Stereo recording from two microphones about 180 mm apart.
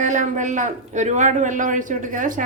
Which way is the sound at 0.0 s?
45° right (ahead or behind).